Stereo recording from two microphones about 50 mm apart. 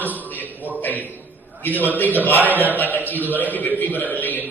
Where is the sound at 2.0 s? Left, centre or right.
Left.